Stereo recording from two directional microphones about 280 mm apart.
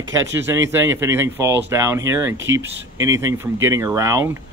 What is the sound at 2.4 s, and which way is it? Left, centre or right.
Speech, right.